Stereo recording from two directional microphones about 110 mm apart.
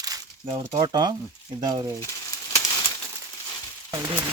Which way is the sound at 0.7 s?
40° right (ahead or behind).